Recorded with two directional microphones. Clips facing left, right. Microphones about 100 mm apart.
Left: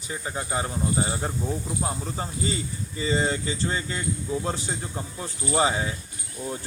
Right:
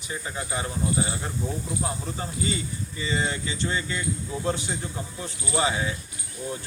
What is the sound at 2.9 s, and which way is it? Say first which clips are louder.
Speech: left 4 dB; 35° left (ahead or behind).